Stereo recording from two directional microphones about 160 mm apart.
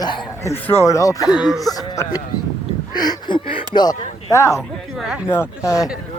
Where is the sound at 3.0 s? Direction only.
25° left (ahead or behind).